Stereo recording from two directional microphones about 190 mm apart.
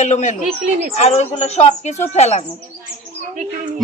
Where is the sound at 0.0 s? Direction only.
40° left (ahead or behind).